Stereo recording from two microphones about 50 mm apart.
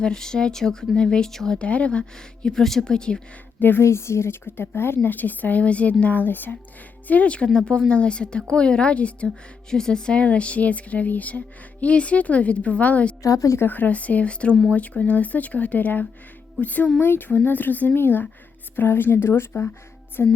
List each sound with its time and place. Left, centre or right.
0.0 s speech: centre
1.5 s speech: left
2.1 s speech: centre
3.6 s a woman's voice: left
3.8 s a woman's voice: left
4.4 s speech: left
5.0 s a woman's voice: left
7.1 s speech: left
9.6 s a woman's voice: centre; by 16.9 s left
17.0 s a woman's voice: left